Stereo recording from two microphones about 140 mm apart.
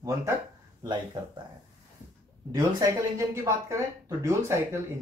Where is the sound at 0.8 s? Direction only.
30° right (ahead or behind).